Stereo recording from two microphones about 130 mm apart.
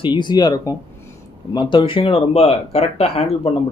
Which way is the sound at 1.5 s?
35° left (ahead or behind).